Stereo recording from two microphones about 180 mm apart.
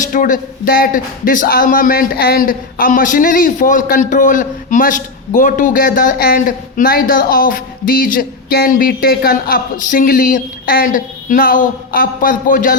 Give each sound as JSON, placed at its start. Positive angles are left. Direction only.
{"t": 0.1, "sound": "speech", "side_deg": 50}